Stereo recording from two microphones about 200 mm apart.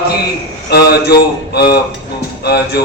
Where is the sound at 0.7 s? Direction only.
50° left (ahead or behind).